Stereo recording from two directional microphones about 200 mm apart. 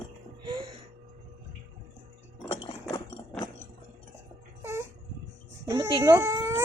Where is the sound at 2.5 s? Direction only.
30° left (ahead or behind).